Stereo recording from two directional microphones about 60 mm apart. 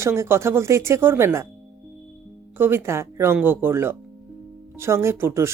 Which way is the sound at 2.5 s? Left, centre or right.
Right.